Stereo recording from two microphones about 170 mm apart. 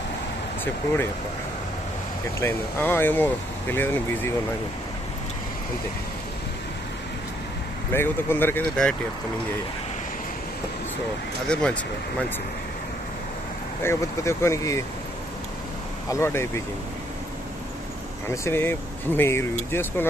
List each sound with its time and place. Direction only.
2.4 s speech: 15° left (ahead or behind)
7.9 s speech: 10° left (ahead or behind)
11.4 s speech: 5° left (ahead or behind)
13.8 s speech: 15° left (ahead or behind)
16.0 s speech: 15° left (ahead or behind)
18.3 s speech: 15° left (ahead or behind)